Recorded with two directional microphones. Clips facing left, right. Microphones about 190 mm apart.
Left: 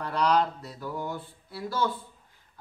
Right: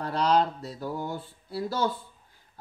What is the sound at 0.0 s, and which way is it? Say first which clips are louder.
Speech: right 1 dB; 30° right (ahead or behind).